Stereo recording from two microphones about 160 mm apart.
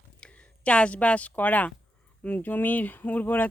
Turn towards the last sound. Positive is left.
turn(degrees=10)  # may be behind; listen again after turning